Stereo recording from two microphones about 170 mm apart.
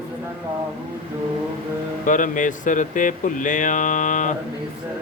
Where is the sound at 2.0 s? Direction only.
50° left (ahead or behind).